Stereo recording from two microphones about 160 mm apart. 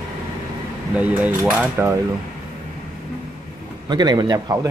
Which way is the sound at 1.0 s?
10° right (ahead or behind).